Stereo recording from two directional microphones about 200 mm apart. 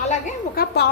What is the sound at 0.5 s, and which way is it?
Speech, 55° left (ahead or behind).